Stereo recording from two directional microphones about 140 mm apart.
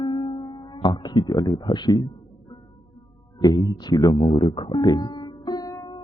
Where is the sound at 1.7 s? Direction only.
30° left (ahead or behind).